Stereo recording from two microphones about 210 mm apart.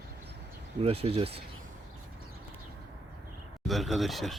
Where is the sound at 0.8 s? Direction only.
30° right (ahead or behind).